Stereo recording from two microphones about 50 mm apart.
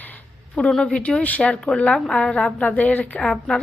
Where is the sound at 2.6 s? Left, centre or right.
Left.